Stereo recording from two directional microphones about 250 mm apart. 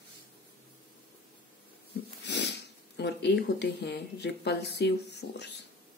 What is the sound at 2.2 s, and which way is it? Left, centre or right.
Speech, left.